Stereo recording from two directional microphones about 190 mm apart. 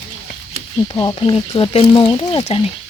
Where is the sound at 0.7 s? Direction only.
20° left (ahead or behind).